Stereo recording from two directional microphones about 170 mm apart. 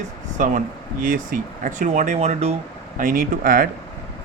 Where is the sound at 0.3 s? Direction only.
45° right (ahead or behind).